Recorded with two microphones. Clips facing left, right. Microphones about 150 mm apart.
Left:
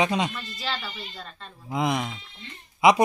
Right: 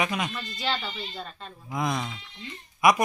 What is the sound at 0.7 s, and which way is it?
Speech, 25° right (ahead or behind).